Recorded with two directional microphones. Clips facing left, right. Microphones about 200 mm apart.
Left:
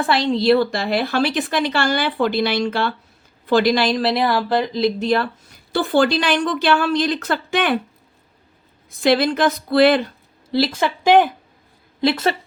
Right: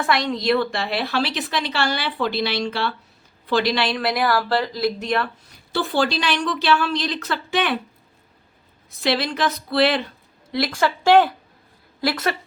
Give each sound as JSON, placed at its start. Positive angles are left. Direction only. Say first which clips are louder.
{"t": 0.0, "sound": "a woman's voice", "louder": "left 4 dB", "side_deg": 30}
{"t": 5.7, "sound": "a woman's voice", "louder": "left 5 dB", "side_deg": 55}
{"t": 9.0, "sound": "a woman's voice", "louder": "left 6 dB", "side_deg": 50}
{"t": 10.5, "sound": "speech", "louder": "left 3 dB", "side_deg": 25}